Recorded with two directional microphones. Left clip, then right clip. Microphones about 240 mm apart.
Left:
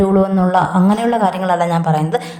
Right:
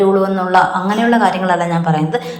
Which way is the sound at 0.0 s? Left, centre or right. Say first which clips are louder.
Right 1 dB; left.